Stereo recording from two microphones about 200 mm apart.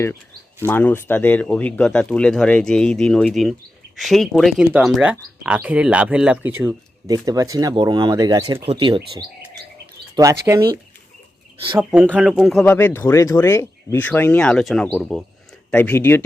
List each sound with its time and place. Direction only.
0.6 s speech: 10° left (ahead or behind); by 9.0 s 25° right (ahead or behind)
10.2 s speech: 15° right (ahead or behind)
11.8 s speech: 5° right (ahead or behind); by 16.2 s 10° left (ahead or behind)